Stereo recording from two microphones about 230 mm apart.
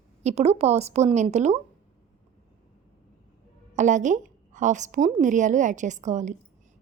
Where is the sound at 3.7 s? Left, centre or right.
Right.